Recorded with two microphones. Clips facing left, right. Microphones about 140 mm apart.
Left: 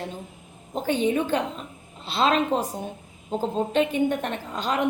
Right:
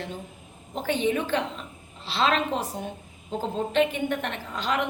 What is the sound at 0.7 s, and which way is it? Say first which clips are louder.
A woman's voice: left 2 dB; 40° left (ahead or behind).